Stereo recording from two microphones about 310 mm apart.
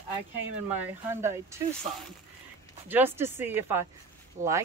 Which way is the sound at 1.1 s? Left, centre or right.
Centre.